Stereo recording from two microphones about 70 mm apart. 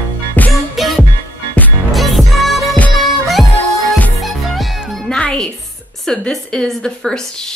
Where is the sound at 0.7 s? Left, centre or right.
Centre.